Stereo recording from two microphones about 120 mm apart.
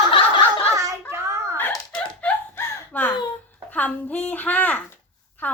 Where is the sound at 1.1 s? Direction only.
25° right (ahead or behind).